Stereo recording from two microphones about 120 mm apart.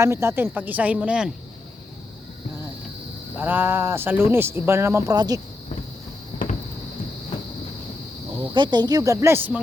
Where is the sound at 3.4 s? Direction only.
15° right (ahead or behind).